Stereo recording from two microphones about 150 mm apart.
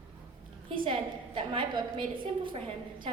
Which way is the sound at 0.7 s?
35° right (ahead or behind).